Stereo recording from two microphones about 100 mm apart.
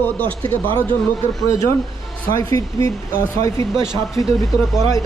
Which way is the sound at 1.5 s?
30° left (ahead or behind).